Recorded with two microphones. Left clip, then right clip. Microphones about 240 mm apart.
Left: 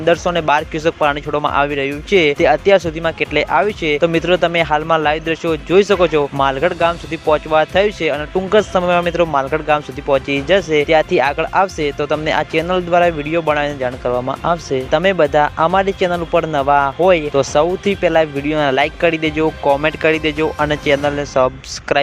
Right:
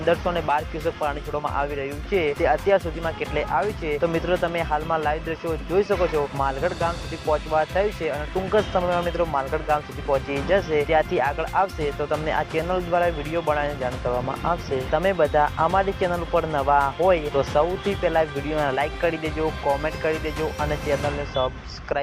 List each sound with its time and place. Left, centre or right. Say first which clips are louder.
0.0 s speech: left 8 dB; left